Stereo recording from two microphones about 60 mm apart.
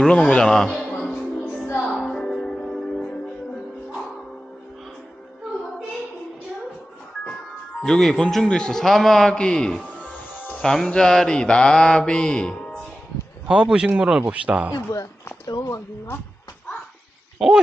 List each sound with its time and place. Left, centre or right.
0.0 s mantra: centre
0.4 s a man's voice: centre
2.0 s music: centre
7.9 s speech: centre
8.4 s mantra: centre
13.5 s speech: centre
15.4 s speech: left
17.4 s speech: centre